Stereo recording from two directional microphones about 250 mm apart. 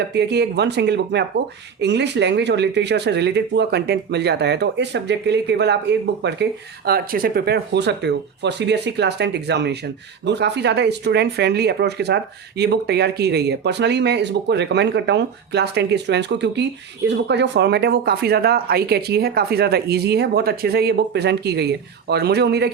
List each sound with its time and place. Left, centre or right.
0.1 s speech: right